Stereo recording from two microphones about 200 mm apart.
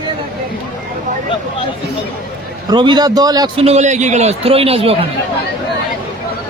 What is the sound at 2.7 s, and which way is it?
A man's voice, 20° right (ahead or behind).